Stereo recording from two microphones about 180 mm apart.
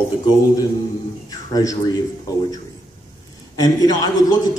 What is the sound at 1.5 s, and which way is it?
Speech, 20° left (ahead or behind).